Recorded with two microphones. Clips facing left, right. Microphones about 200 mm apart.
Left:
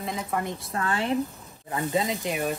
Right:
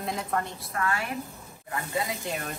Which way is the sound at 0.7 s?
30° left (ahead or behind).